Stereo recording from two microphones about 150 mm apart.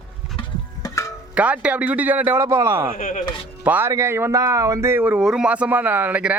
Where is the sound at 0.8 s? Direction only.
20° left (ahead or behind).